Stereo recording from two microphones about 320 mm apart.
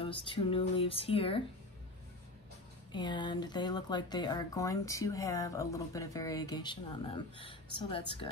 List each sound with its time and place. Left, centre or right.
0.0 s speech: centre
2.9 s speech: centre